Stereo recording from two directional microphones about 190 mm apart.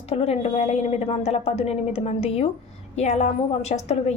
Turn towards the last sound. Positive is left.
turn(degrees=35)  # may be behind; listen again after turning